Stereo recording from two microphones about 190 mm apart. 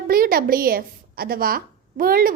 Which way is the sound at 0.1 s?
50° right (ahead or behind).